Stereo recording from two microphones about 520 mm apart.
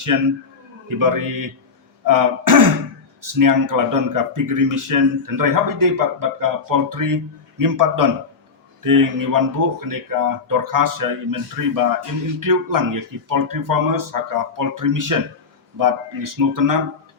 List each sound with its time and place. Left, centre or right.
0.9 s speech: right